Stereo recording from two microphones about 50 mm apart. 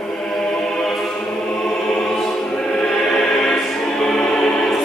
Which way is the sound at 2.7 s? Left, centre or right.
Centre.